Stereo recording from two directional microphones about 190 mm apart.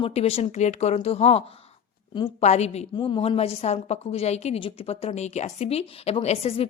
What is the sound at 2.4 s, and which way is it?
A woman's voice, 35° left (ahead or behind).